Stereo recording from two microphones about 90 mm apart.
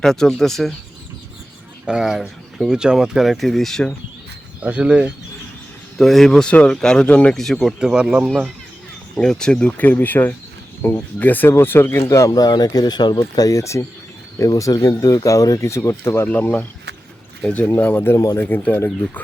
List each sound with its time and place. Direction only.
0.0 s speech: 5° left (ahead or behind)
1.9 s speech: 5° right (ahead or behind)
4.6 s speech: 15° right (ahead or behind)
6.0 s speech: centre (ahead or behind)
7.8 s speech: 5° right (ahead or behind)
9.1 s speech: 5° left (ahead or behind); by 12.0 s 25° left (ahead or behind)
12.0 s speech: 35° left (ahead or behind)
14.5 s speech: 45° left (ahead or behind); by 16.3 s 30° left (ahead or behind)
16.3 s speech: 20° left (ahead or behind)